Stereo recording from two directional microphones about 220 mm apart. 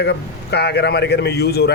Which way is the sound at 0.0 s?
50° left (ahead or behind).